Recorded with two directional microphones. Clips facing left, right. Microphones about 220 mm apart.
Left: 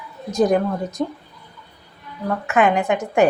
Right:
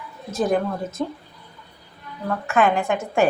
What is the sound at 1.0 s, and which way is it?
Speech, 15° left (ahead or behind).